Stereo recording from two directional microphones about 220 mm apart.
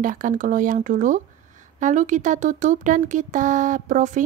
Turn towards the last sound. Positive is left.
turn(degrees=-35)  # may be behind; listen again after turning